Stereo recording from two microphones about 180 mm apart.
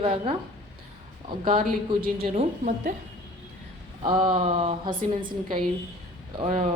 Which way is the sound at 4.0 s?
25° right (ahead or behind).